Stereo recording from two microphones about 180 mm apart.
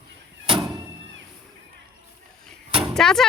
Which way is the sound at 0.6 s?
20° right (ahead or behind).